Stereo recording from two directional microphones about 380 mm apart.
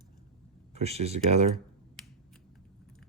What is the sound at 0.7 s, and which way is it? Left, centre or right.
Speech, centre.